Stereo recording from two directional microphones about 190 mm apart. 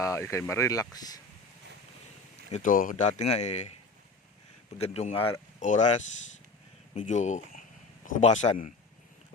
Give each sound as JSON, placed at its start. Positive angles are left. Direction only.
{"t": 0.0, "sound": "speech", "side_deg": 15}
{"t": 2.5, "sound": "speech", "side_deg": 45}
{"t": 4.8, "sound": "speech", "side_deg": 35}
{"t": 5.5, "sound": "speech", "side_deg": 40}